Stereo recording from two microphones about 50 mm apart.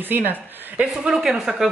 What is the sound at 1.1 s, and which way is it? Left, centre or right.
Speech, centre.